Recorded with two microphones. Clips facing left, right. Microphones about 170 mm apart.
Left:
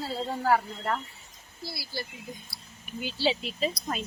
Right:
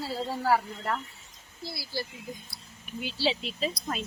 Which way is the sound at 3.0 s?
Centre (ahead or behind).